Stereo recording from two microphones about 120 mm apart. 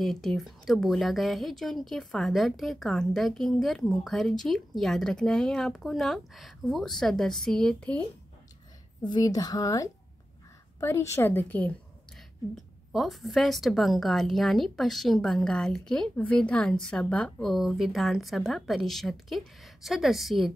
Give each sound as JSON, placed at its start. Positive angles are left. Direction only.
{"t": 0.0, "sound": "a woman's voice", "side_deg": 0}
{"t": 9.0, "sound": "a woman's voice", "side_deg": 35}
{"t": 12.5, "sound": "a woman's voice", "side_deg": 0}